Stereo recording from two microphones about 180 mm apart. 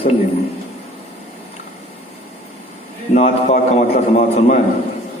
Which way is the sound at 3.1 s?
40° left (ahead or behind).